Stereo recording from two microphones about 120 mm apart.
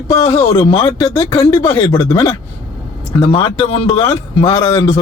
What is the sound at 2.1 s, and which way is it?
Speech, 35° left (ahead or behind).